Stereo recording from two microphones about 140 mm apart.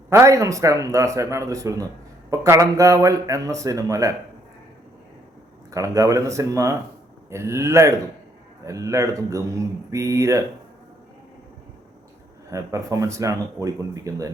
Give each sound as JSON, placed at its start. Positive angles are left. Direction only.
{"t": 0.1, "sound": "speech", "side_deg": -20}
{"t": 5.7, "sound": "speech", "side_deg": -25}
{"t": 12.5, "sound": "speech", "side_deg": -20}